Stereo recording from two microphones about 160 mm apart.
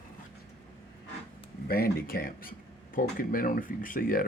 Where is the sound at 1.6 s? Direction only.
70° left (ahead or behind).